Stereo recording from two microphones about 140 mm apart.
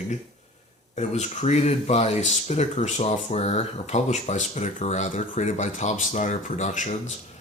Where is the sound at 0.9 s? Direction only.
55° left (ahead or behind).